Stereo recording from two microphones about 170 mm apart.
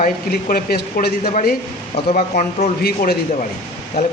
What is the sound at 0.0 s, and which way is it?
Speech, 60° left (ahead or behind).